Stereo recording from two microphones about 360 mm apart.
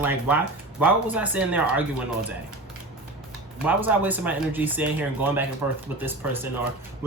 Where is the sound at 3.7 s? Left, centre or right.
Centre.